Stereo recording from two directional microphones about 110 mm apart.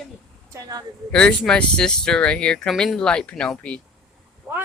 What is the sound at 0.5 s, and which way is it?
Speech, 35° right (ahead or behind).